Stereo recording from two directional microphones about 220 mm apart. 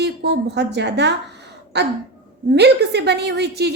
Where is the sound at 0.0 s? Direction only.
50° right (ahead or behind).